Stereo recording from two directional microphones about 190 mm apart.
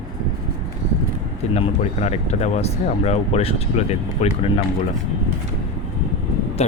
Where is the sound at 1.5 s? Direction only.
35° left (ahead or behind).